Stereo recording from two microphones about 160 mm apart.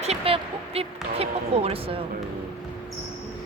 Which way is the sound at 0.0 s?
40° right (ahead or behind).